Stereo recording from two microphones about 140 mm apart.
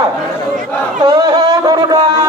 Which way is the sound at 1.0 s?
30° right (ahead or behind).